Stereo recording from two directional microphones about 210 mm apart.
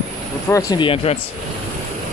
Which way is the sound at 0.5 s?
15° left (ahead or behind).